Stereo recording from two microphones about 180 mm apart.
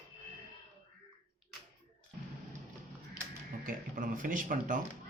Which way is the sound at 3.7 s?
50° right (ahead or behind).